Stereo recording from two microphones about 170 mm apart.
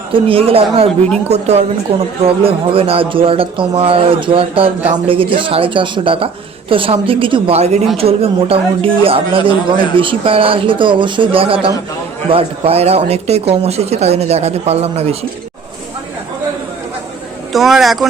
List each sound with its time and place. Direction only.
0.1 s a man's voice: 35° right (ahead or behind)
17.5 s a man's voice: centre (ahead or behind)